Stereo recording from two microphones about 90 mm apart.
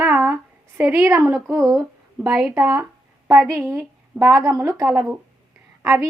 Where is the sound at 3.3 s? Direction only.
35° right (ahead or behind).